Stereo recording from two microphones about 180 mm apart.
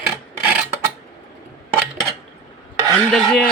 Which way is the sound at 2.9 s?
Centre (ahead or behind).